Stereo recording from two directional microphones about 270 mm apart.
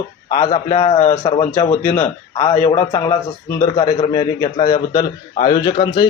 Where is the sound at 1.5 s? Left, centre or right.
Centre.